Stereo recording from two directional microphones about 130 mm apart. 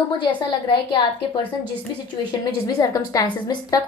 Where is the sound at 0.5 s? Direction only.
40° left (ahead or behind).